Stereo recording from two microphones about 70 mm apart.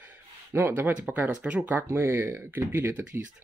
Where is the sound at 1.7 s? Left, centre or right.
Right.